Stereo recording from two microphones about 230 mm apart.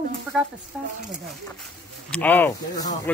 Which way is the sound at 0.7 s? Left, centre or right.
Centre.